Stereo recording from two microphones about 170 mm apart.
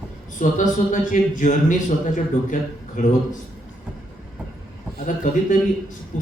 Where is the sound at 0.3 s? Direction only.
50° left (ahead or behind).